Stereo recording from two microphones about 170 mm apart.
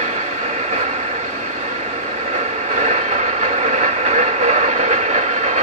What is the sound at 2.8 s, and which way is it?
Train, 40° right (ahead or behind).